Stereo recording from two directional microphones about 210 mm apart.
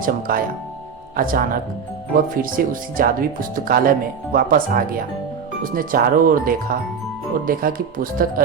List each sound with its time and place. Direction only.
0.0 s speech: 40° right (ahead or behind)